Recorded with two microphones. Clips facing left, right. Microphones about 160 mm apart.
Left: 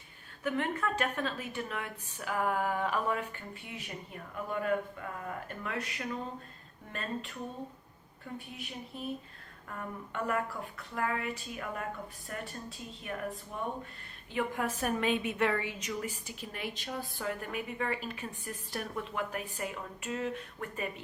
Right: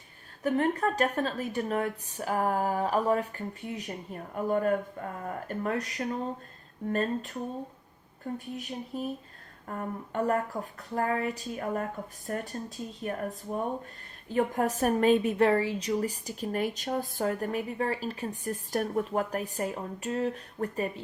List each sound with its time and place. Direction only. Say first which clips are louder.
0.4 s a woman's voice: right 6 dB; 40° right (ahead or behind)